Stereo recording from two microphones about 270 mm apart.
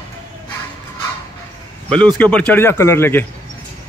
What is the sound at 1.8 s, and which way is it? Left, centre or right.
Speech, centre.